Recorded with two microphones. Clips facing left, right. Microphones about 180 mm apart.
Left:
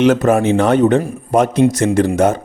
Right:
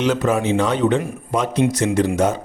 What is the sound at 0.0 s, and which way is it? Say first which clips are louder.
A man's voice: left 6 dB; 50° left (ahead or behind).